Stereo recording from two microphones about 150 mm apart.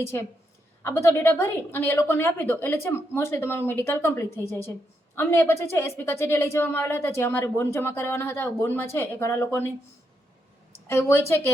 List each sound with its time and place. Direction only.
0.8 s a woman's voice: 15° left (ahead or behind)
10.8 s a woman's voice: 15° left (ahead or behind)